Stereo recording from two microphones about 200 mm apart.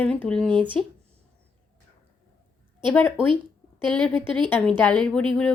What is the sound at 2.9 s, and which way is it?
Speech, 10° left (ahead or behind).